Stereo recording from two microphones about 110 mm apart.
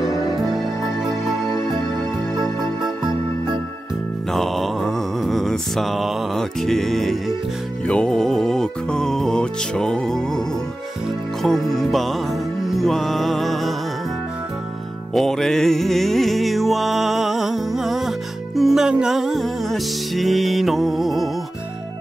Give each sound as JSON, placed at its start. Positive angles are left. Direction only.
{"t": 2.6, "sound": "music", "side_deg": -40}
{"t": 4.3, "sound": "mantra", "side_deg": 0}
{"t": 7.8, "sound": "music", "side_deg": 10}
{"t": 11.4, "sound": "music", "side_deg": 5}
{"t": 15.1, "sound": "music", "side_deg": 5}